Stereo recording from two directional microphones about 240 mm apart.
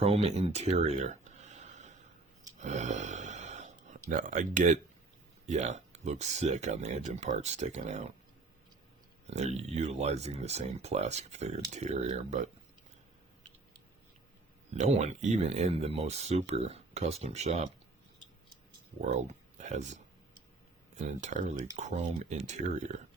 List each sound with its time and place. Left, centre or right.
0.0 s speech: right
2.6 s a sound: right
4.1 s speech: right
9.2 s speech: right
14.8 s speech: right
18.9 s speech: right